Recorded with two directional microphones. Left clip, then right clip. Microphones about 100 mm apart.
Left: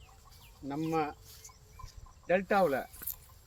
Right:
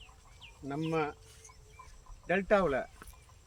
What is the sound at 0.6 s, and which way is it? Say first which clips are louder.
Speech: left 1 dB; 20° right (ahead or behind).